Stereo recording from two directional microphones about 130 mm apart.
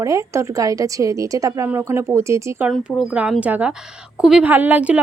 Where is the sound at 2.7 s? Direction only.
Centre (ahead or behind).